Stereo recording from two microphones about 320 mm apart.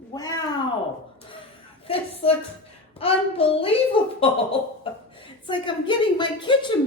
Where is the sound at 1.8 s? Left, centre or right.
Centre.